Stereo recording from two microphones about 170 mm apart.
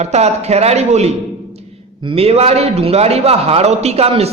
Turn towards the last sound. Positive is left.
turn(degrees=-35)  # may be behind; listen again after turning